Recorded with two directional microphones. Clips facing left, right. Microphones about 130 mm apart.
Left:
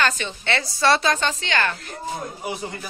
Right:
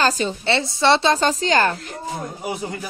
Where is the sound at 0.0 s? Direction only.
35° right (ahead or behind).